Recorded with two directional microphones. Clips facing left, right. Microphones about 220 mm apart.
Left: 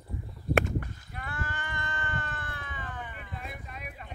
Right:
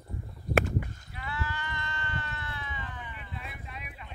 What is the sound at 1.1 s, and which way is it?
Sheep, 50° left (ahead or behind).